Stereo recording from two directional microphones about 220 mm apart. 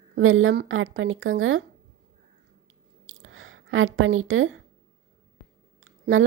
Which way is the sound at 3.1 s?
65° right (ahead or behind).